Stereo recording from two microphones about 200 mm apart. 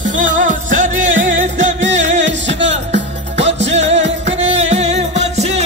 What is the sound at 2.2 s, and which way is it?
Music, 65° right (ahead or behind).